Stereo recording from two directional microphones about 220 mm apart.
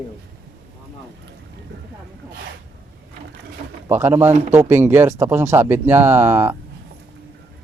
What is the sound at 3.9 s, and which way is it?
Speech, 10° right (ahead or behind).